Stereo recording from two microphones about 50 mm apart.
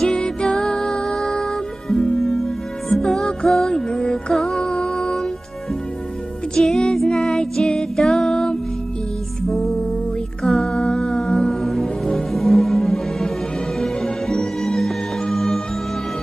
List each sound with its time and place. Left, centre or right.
0.0 s music: centre
6.5 s music: centre
9.5 s music: centre
10.4 s humming: centre
11.6 s music: centre